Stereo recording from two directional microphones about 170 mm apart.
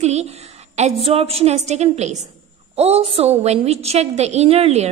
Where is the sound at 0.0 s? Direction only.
40° right (ahead or behind).